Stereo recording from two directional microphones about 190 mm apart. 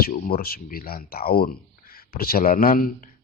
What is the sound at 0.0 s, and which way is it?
Speech, 50° left (ahead or behind).